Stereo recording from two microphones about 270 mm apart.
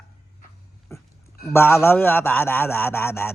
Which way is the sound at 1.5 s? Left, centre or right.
Centre.